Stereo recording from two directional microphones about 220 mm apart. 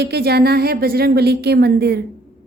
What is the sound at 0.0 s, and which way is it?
A woman's voice, 45° right (ahead or behind).